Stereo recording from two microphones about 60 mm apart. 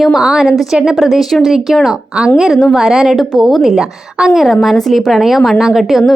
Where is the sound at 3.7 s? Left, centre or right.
Centre.